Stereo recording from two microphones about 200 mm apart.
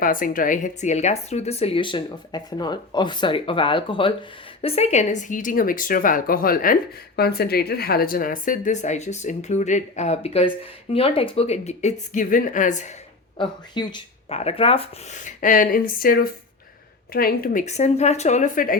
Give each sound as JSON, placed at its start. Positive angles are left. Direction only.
{"t": 0.0, "sound": "a woman's voice", "side_deg": 45}
{"t": 13.4, "sound": "a woman's voice", "side_deg": 20}